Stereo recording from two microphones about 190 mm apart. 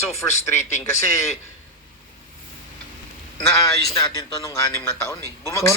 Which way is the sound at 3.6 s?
20° left (ahead or behind).